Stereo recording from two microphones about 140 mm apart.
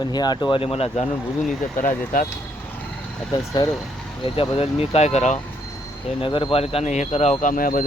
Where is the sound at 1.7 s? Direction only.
70° left (ahead or behind).